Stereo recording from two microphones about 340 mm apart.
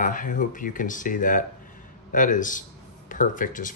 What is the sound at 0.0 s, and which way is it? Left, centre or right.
Speech, left.